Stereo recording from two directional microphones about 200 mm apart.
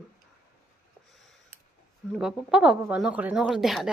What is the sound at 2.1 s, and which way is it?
Speech, centre (ahead or behind).